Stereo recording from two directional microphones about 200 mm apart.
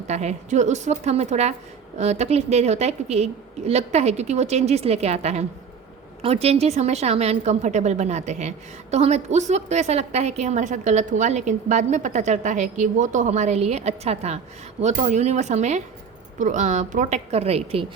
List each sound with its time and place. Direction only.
0.1 s a woman's voice: 35° right (ahead or behind)